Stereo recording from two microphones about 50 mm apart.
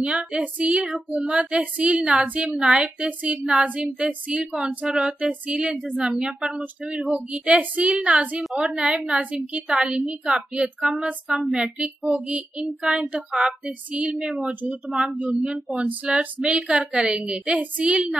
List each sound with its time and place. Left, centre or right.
0.0 s speech: right
2.5 s a woman's voice: centre
2.8 s a woman's voice: right
14.5 s speech: right